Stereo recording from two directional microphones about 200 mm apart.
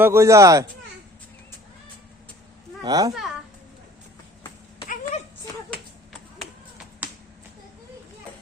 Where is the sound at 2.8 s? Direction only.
20° right (ahead or behind).